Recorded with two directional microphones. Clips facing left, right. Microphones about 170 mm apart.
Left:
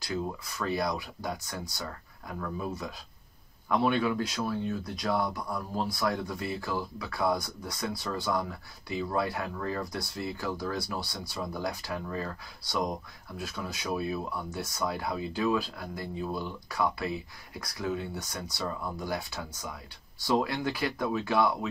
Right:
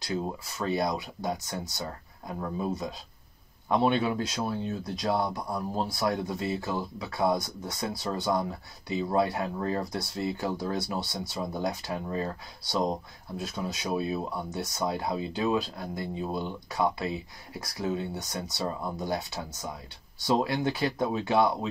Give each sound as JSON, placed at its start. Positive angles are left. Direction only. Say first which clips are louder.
{"t": 0.0, "sound": "speech", "louder": "right 2 dB", "side_deg": -25}